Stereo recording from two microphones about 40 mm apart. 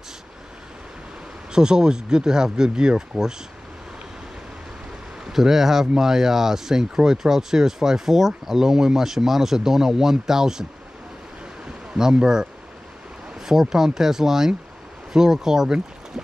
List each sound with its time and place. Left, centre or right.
1.5 s speech: centre
5.2 s speech: centre
11.9 s speech: centre
13.5 s speech: centre